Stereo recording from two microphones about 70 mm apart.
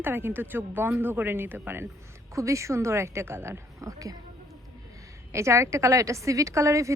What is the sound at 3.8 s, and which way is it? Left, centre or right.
Speech, right.